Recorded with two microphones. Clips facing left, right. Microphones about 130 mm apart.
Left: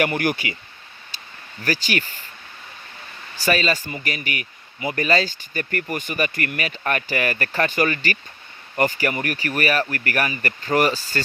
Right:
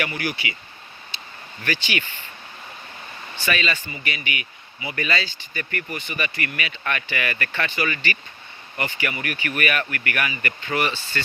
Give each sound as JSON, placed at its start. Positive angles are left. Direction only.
{"t": 0.0, "sound": "speech", "side_deg": 50}
{"t": 1.1, "sound": "a sound", "side_deg": 40}
{"t": 1.6, "sound": "speech", "side_deg": 40}
{"t": 3.3, "sound": "speech", "side_deg": 40}